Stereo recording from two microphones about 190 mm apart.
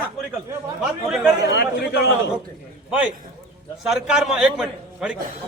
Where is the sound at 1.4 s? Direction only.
60° left (ahead or behind).